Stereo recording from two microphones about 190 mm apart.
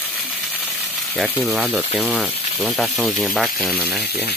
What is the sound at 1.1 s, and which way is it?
Speech, centre (ahead or behind).